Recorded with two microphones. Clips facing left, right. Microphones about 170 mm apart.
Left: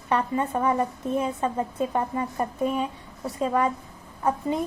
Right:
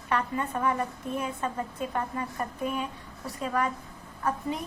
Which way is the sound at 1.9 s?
25° left (ahead or behind).